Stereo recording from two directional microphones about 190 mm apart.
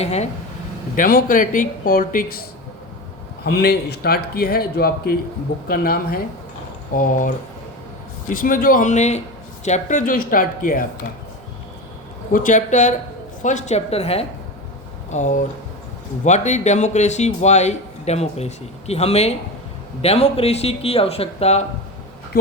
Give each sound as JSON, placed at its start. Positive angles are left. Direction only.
{"t": 0.0, "sound": "a man's voice", "side_deg": 35}
{"t": 0.9, "sound": "speech", "side_deg": 50}
{"t": 12.3, "sound": "a man's voice", "side_deg": 45}